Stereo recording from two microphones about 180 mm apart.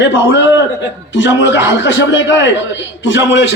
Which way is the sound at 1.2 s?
90° left.